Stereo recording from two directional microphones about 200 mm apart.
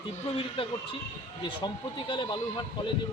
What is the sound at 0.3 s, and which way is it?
Speech, 25° left (ahead or behind).